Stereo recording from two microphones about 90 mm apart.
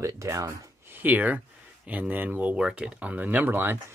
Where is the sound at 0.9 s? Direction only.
20° right (ahead or behind).